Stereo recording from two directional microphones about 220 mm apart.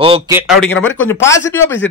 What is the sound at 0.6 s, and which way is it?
Speech, 5° left (ahead or behind).